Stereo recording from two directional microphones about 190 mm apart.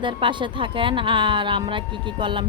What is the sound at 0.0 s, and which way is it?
Speech, 25° right (ahead or behind).